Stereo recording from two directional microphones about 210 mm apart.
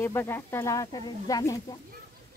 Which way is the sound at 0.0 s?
10° left (ahead or behind).